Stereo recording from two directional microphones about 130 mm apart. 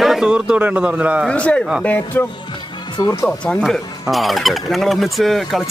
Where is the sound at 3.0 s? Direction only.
25° left (ahead or behind).